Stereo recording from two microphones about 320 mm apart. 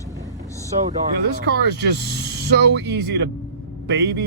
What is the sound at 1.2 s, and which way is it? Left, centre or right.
Speech, right.